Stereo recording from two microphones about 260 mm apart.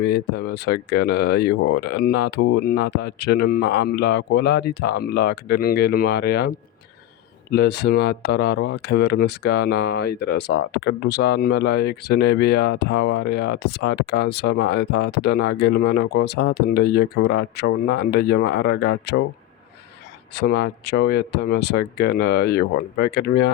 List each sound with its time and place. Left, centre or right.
0.0 s speech: left
20.5 s speech: left